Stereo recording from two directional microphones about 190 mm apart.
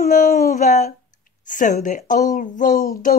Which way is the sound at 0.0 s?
45° left (ahead or behind).